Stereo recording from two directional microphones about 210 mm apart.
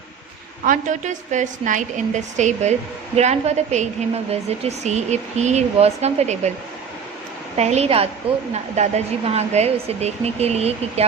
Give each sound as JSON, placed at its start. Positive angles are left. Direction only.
{"t": 0.6, "sound": "a woman's voice", "side_deg": -40}
{"t": 7.5, "sound": "a woman's voice", "side_deg": -30}